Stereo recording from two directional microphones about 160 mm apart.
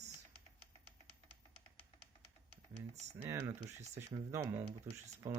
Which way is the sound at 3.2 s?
15° right (ahead or behind).